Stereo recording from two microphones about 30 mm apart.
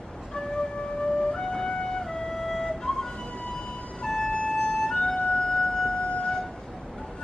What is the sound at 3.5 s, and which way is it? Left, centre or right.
Music, left.